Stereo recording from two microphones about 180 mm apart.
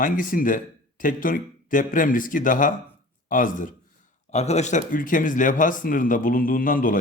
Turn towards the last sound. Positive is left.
turn(degrees=50)  # may be behind; listen again after turning